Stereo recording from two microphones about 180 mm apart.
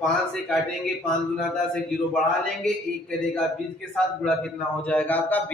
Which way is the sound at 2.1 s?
5° left (ahead or behind).